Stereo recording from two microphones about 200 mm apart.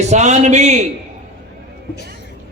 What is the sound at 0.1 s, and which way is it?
Speech, 35° right (ahead or behind).